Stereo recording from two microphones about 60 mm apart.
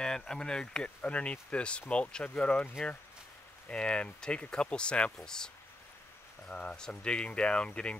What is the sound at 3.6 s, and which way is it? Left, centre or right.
Speech, centre.